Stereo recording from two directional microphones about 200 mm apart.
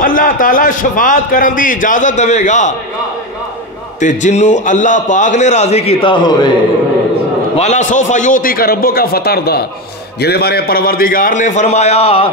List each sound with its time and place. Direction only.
0.0 s a man's voice: 45° left (ahead or behind)
4.0 s a man's voice: 40° left (ahead or behind); by 6.5 s 25° left (ahead or behind)
7.5 s a man's voice: 35° left (ahead or behind)